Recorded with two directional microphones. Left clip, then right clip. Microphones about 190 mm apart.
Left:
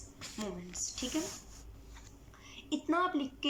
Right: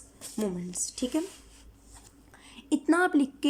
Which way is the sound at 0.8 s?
35° right (ahead or behind).